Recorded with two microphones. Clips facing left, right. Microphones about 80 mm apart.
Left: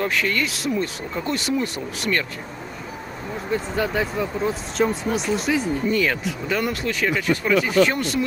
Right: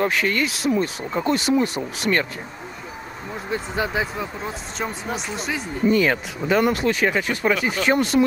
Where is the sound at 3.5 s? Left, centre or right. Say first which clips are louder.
Left 2 dB; centre.